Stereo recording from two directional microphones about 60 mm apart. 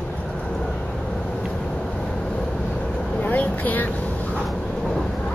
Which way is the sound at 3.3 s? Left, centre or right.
Left.